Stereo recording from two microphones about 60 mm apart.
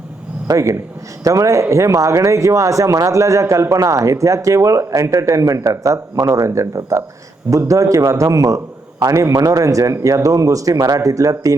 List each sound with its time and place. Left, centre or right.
0.4 s a man's voice: right